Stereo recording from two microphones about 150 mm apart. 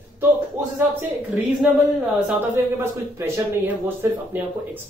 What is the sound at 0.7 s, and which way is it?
Speech, 15° right (ahead or behind).